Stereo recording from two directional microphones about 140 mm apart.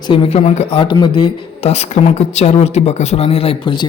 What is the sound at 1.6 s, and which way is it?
Speech, 50° left (ahead or behind).